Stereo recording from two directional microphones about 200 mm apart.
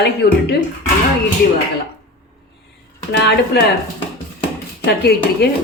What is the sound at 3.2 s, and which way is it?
Speech, 55° left (ahead or behind).